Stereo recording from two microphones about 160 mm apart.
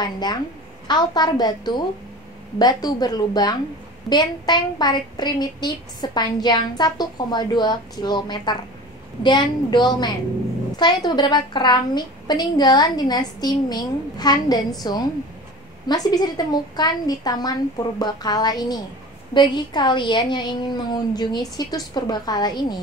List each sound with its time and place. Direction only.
0.0 s a woman's voice: 25° left (ahead or behind)